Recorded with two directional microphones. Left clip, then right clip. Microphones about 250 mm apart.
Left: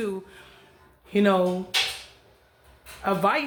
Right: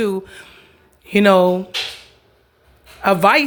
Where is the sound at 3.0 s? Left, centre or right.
Right.